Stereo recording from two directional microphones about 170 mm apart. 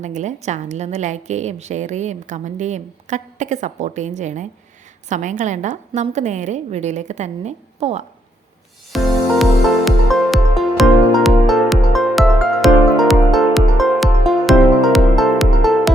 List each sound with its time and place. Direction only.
0.0 s a woman's voice: 45° right (ahead or behind)
8.9 s music: centre (ahead or behind)